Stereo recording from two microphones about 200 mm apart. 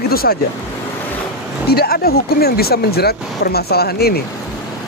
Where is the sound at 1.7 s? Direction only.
50° left (ahead or behind).